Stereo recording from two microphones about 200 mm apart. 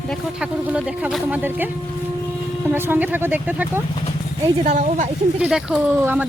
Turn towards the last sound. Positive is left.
turn(degrees=-5)  # may be behind; listen again after turning